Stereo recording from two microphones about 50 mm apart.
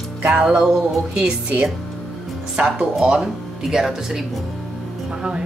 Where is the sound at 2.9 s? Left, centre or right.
Centre.